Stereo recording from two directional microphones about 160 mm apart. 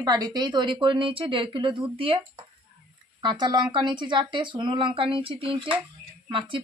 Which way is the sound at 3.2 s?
25° right (ahead or behind).